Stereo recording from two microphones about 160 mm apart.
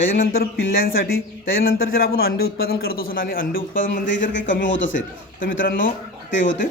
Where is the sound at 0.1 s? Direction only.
65° left (ahead or behind).